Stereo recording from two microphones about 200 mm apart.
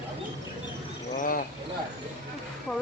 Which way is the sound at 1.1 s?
45° left (ahead or behind).